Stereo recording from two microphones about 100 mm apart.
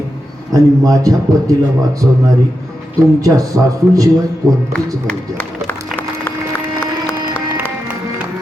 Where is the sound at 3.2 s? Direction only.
35° right (ahead or behind).